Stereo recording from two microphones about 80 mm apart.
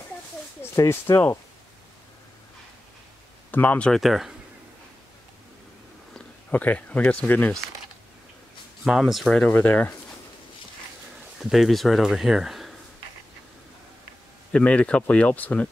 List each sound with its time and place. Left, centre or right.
0.7 s speech: left
3.5 s speech: centre
3.9 s speech: centre
6.5 s speech: centre
8.8 s speech: centre
9.4 s speech: left
11.4 s speech: centre
14.5 s speech: centre